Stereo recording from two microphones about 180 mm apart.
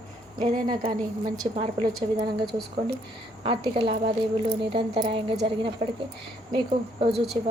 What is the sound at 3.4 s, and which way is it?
Speech, 30° right (ahead or behind).